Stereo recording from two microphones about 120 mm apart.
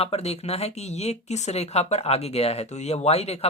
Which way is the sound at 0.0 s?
60° left (ahead or behind).